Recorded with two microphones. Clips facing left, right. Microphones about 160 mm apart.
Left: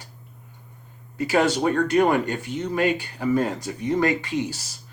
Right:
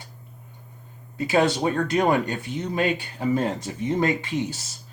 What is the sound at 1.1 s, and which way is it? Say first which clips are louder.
Speech: even; 20° right (ahead or behind).